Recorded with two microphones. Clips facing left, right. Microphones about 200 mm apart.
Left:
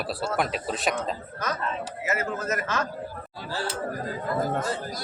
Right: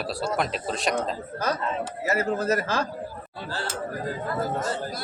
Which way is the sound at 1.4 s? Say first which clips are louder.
Right 3 dB; 30° right (ahead or behind).